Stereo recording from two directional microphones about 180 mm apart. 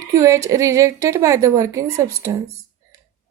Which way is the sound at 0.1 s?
20° right (ahead or behind).